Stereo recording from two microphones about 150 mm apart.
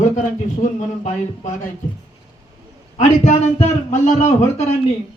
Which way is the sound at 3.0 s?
50° left (ahead or behind).